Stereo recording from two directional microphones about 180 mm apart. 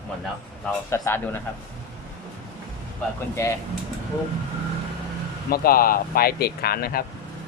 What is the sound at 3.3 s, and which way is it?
Speech, 15° left (ahead or behind).